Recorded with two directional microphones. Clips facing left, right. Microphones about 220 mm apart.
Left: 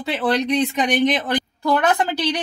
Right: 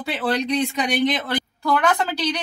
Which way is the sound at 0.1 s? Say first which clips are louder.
Left 3 dB; 20° left (ahead or behind).